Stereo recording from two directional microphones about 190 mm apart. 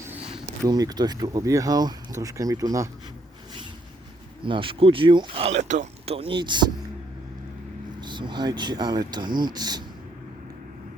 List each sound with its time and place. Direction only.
0.6 s speech: 20° right (ahead or behind)
4.4 s speech: 25° right (ahead or behind)
8.0 s speech: 25° right (ahead or behind)